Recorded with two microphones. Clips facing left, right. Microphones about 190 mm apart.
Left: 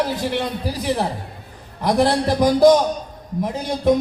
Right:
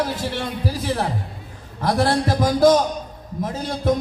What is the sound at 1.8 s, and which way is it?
Speech, 15° left (ahead or behind).